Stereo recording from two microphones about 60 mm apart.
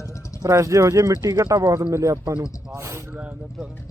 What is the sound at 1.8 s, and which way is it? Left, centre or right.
Speech, right.